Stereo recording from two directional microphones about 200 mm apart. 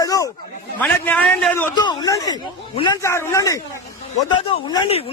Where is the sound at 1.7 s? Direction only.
20° left (ahead or behind).